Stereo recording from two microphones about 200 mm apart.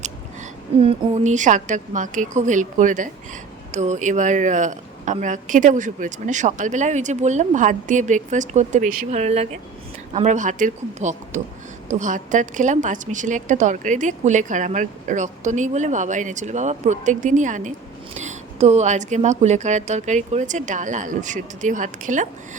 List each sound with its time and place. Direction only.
0.8 s a woman's voice: 30° right (ahead or behind)